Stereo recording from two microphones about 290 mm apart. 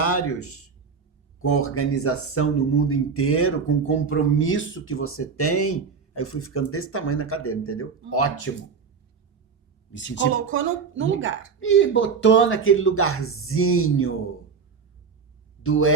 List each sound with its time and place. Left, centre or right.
0.0 s a man's voice: left
9.9 s a woman's voice: left
10.3 s speech: right
11.6 s speech: left
15.6 s speech: left